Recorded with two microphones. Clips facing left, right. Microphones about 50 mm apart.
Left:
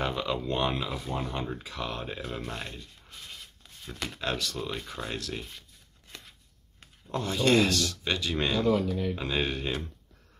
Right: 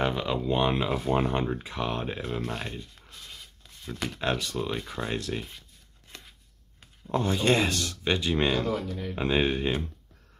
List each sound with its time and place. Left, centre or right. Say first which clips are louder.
0.0 s speech: right 3 dB; centre
0.7 s speech: right 7 dB; right
1.4 s speech: right 5 dB; right
2.2 s speech: right 4 dB; centre
4.2 s speech: right 3 dB; right
7.1 s speech: right 1 dB; right